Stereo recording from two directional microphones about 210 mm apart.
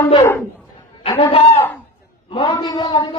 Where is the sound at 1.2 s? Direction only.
25° left (ahead or behind).